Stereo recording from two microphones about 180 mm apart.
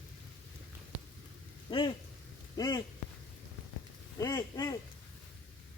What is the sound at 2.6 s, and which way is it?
Speech, 20° left (ahead or behind).